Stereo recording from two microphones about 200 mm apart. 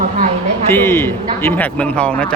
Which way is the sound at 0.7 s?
10° left (ahead or behind).